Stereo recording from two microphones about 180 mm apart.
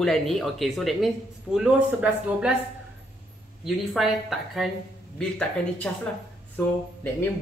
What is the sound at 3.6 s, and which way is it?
Speech, centre (ahead or behind).